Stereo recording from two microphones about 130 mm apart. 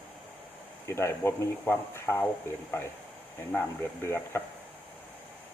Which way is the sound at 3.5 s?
15° left (ahead or behind).